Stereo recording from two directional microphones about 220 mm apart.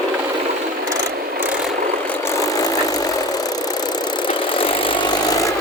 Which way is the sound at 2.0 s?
10° left (ahead or behind).